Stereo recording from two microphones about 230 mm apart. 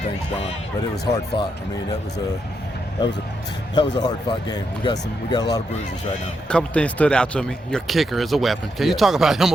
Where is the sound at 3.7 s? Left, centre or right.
Centre.